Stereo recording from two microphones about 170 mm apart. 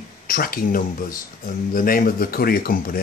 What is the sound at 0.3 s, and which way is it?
Speech, 60° left (ahead or behind).